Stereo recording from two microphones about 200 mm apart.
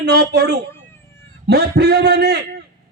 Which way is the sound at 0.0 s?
55° right (ahead or behind).